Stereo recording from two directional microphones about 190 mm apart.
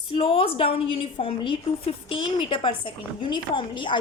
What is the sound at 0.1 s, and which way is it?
A woman's voice, 30° left (ahead or behind).